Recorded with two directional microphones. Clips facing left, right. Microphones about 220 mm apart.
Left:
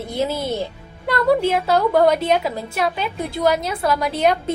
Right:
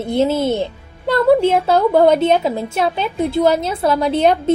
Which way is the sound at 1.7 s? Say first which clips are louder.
Right 3 dB; 25° right (ahead or behind).